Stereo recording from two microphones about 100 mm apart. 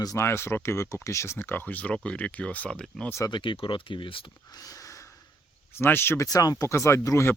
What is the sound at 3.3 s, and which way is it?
Speech, 55° left (ahead or behind).